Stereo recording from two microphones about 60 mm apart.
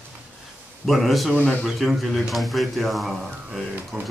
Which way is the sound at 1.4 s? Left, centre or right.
Left.